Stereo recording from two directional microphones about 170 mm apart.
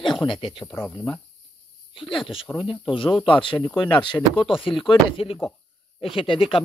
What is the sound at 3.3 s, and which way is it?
Speech, 30° left (ahead or behind).